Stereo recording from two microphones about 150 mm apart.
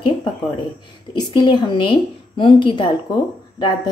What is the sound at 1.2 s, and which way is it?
A woman's voice, 30° left (ahead or behind).